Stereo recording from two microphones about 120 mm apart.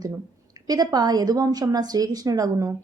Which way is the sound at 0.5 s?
35° right (ahead or behind).